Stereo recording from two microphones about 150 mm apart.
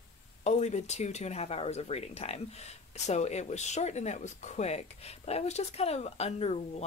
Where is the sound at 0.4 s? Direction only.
50° left (ahead or behind).